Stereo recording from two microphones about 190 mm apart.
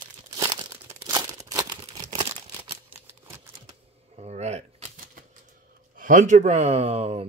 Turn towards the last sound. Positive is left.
turn(degrees=-30)  # may be behind; listen again after turning